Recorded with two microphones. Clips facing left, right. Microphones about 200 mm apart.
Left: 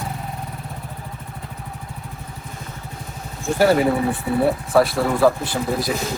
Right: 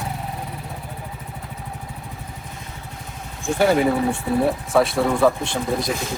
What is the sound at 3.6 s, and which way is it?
Speech, centre (ahead or behind).